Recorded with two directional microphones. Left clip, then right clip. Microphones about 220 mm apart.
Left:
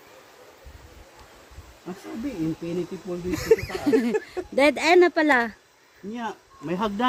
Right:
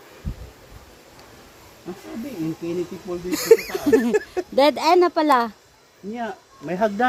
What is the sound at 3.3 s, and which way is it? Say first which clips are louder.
Speech: right 5 dB; 30° right (ahead or behind).